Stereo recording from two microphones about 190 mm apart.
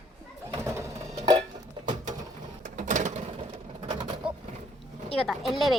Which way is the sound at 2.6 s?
40° right (ahead or behind).